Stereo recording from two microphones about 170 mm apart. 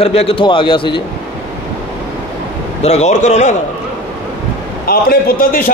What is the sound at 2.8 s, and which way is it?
Speech, 40° left (ahead or behind).